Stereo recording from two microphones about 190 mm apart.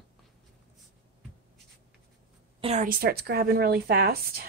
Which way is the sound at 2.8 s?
55° right (ahead or behind).